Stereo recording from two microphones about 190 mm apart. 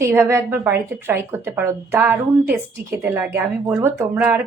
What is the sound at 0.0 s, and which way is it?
A woman's voice, 15° right (ahead or behind).